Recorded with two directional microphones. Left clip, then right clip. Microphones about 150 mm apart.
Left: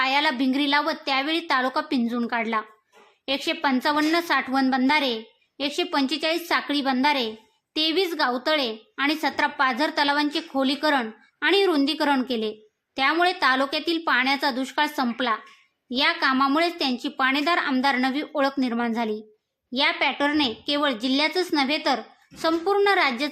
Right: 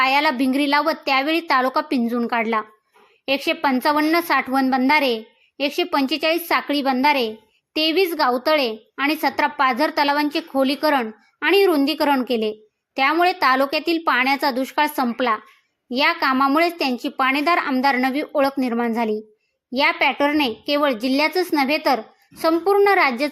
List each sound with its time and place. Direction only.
0.0 s a sound: 20° right (ahead or behind)
0.4 s a woman's voice: 20° right (ahead or behind)
5.6 s a woman's voice: 15° right (ahead or behind)